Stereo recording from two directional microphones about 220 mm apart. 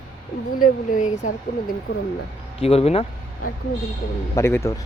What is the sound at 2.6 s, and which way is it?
Speech, 25° left (ahead or behind).